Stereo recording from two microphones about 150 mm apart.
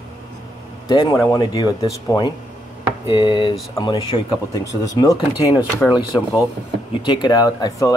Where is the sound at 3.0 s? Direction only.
30° left (ahead or behind).